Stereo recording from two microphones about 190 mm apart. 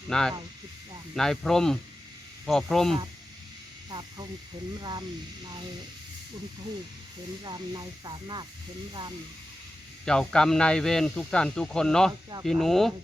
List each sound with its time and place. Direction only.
0.1 s speech: 5° left (ahead or behind)
3.8 s speech: 20° right (ahead or behind)
7.4 s speech: 20° right (ahead or behind)
10.1 s speech: 5° left (ahead or behind)